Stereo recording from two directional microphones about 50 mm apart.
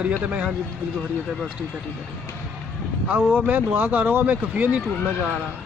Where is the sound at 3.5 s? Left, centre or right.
Right.